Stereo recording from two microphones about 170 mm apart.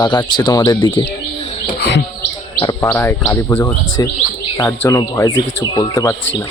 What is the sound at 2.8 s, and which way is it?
Speech, 10° left (ahead or behind).